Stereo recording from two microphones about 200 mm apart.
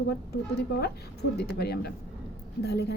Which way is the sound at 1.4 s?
55° left (ahead or behind).